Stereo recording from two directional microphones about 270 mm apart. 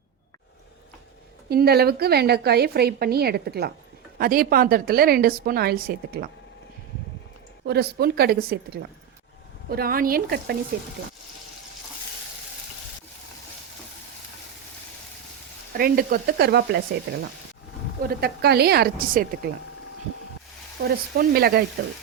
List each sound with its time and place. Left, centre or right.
1.5 s a woman's voice: right
7.6 s a woman's voice: right
15.7 s a woman's voice: right
18.1 s a woman's voice: right
20.8 s a woman's voice: right